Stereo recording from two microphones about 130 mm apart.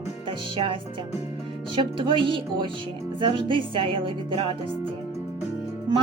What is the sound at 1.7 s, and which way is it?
Speech, 40° right (ahead or behind).